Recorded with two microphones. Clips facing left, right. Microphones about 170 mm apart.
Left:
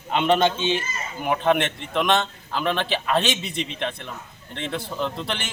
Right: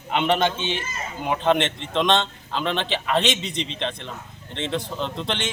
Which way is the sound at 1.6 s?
25° right (ahead or behind).